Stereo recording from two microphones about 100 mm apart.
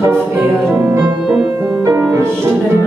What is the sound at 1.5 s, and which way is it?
Music, 25° right (ahead or behind).